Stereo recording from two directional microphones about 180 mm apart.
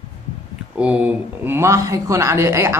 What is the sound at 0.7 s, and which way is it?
Speech, 5° right (ahead or behind).